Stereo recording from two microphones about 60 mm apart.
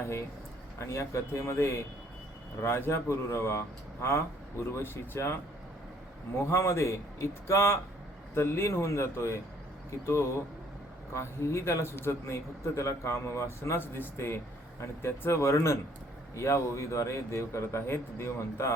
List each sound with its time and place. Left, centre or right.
0.0 s a man's voice: left
6.4 s a man's voice: left